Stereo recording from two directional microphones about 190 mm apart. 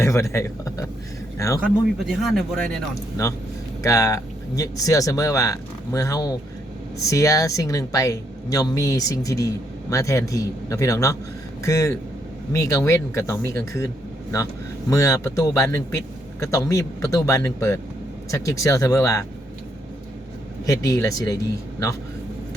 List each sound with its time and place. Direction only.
0.0 s a man's voice: 15° left (ahead or behind)
1.6 s a man's voice: centre (ahead or behind)
3.8 s a man's voice: 15° left (ahead or behind)
20.7 s a man's voice: 15° left (ahead or behind)